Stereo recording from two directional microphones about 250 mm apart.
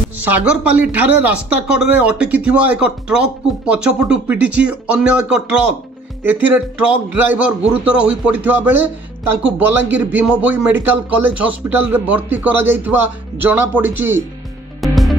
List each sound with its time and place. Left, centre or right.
0.2 s speech: centre
14.8 s music: centre